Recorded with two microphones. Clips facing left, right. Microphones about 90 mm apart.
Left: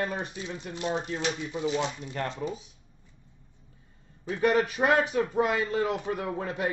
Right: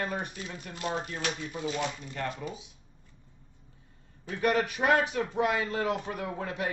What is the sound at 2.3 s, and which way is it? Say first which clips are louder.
Speech: left 3 dB; 30° left (ahead or behind).